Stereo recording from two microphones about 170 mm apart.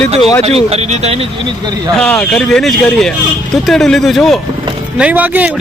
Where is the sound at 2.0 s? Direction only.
5° left (ahead or behind).